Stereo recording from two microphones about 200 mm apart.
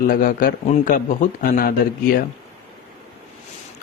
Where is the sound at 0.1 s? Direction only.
45° left (ahead or behind).